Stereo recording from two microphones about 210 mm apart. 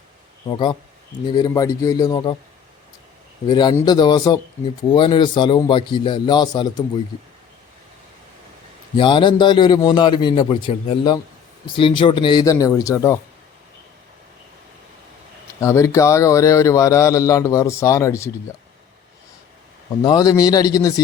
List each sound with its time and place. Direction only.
0.4 s a man's voice: 20° left (ahead or behind)
3.5 s speech: 20° left (ahead or behind)
9.0 s speech: 20° left (ahead or behind)
15.6 s a man's voice: 15° left (ahead or behind)
20.0 s a man's voice: 20° left (ahead or behind)